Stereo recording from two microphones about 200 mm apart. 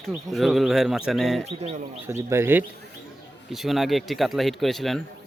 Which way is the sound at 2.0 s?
10° right (ahead or behind).